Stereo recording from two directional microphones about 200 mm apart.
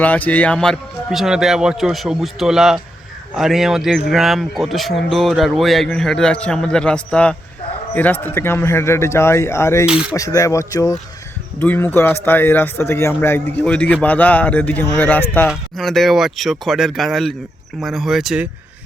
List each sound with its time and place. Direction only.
0.0 s speech: 10° left (ahead or behind)
9.8 s speech: 5° right (ahead or behind)
10.1 s speech: 15° left (ahead or behind); by 18.4 s centre (ahead or behind)